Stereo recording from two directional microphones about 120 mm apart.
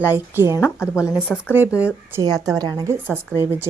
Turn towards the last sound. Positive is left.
turn(degrees=-20)  # may be behind; listen again after turning